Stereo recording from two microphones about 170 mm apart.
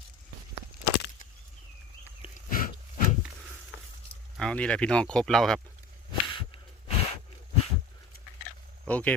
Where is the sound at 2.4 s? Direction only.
55° left (ahead or behind).